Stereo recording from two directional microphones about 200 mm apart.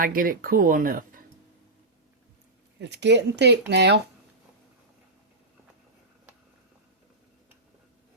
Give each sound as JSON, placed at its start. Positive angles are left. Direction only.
{"t": 0.0, "sound": "speech", "side_deg": -45}
{"t": 2.7, "sound": "speech", "side_deg": -60}